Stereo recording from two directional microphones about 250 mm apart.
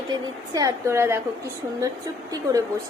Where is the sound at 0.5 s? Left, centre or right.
Centre.